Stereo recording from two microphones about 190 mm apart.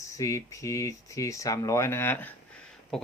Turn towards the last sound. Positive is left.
turn(degrees=0)  # may be behind; listen again after turning